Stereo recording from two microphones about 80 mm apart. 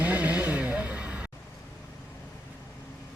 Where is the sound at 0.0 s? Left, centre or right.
Centre.